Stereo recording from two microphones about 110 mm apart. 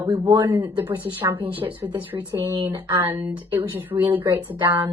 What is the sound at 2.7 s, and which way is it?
Speech, 25° right (ahead or behind).